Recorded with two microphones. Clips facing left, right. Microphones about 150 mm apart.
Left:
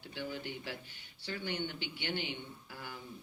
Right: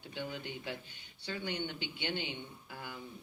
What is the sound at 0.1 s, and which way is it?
Speech, 20° right (ahead or behind).